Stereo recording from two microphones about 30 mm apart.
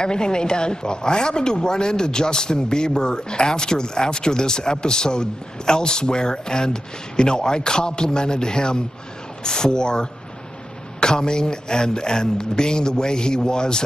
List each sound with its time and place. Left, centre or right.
0.0 s speech: left